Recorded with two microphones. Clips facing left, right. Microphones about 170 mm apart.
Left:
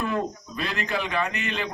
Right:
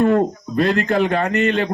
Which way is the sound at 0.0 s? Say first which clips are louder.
Right 12 dB; 60° right (ahead or behind).